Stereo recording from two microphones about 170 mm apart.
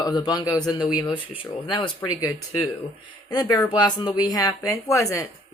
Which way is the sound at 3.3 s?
25° left (ahead or behind).